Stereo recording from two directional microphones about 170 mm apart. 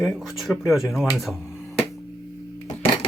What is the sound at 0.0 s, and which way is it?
Speech, centre (ahead or behind).